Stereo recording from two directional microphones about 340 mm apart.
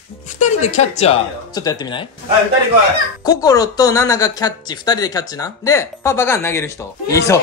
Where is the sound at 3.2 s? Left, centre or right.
Centre.